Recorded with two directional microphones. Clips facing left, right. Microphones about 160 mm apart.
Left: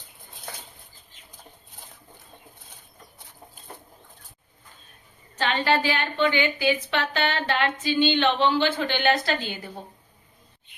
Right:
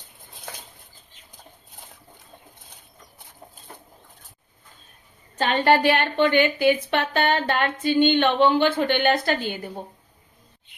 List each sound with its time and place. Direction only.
5.4 s a woman's voice: 50° right (ahead or behind)